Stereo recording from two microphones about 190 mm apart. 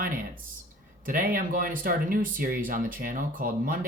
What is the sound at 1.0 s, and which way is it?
Speech, 45° right (ahead or behind).